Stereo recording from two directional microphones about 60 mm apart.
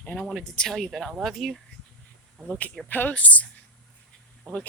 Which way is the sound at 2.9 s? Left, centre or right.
Left.